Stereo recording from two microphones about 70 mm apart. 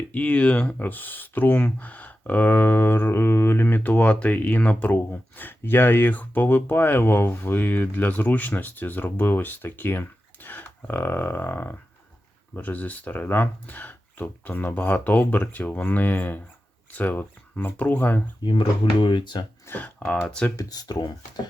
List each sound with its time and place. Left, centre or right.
0.1 s speech: centre
18.4 s speech: left
19.7 s speech: left
20.6 s speech: left